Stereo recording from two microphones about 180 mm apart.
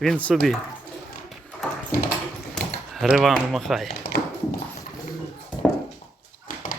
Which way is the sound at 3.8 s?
60° left (ahead or behind).